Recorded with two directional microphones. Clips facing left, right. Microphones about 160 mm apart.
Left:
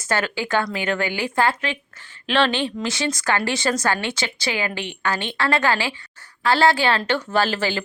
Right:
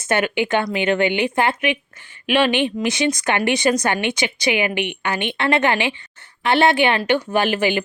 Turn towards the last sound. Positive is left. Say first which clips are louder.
# right 3 dB
turn(degrees=-15)  # may be behind; listen again after turning